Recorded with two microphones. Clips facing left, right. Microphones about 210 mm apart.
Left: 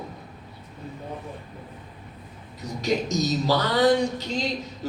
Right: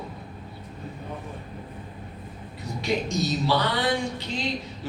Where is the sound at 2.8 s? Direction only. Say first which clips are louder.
Left 2 dB; 40° left (ahead or behind).